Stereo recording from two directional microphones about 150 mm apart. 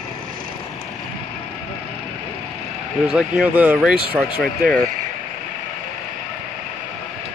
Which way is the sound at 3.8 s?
Centre (ahead or behind).